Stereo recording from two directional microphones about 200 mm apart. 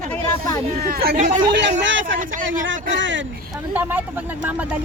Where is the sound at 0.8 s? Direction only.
50° right (ahead or behind).